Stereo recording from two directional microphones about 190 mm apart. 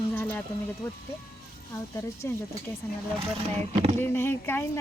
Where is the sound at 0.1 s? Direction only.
10° left (ahead or behind).